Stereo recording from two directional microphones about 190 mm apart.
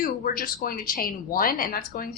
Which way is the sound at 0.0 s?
50° left (ahead or behind).